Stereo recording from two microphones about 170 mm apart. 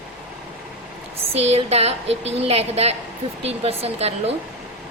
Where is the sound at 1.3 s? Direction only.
35° right (ahead or behind).